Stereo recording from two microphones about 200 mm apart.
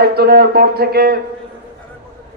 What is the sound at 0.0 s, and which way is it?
A man's voice, 50° right (ahead or behind).